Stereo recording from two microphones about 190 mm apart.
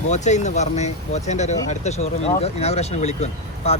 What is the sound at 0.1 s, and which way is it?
Speech, 40° left (ahead or behind).